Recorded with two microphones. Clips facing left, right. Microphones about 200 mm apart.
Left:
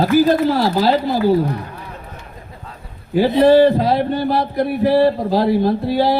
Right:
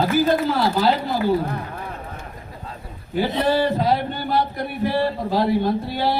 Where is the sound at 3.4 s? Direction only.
35° left (ahead or behind).